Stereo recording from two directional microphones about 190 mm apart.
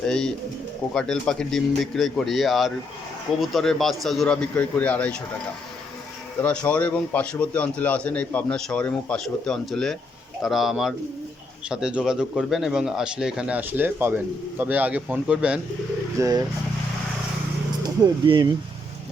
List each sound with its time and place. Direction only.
0.0 s speech: 5° left (ahead or behind)
6.4 s a man's voice: 5° left (ahead or behind)
16.1 s speech: 15° right (ahead or behind)
17.8 s speech: 20° right (ahead or behind)